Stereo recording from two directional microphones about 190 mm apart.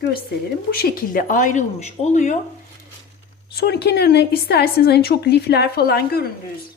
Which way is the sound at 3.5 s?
55° left (ahead or behind).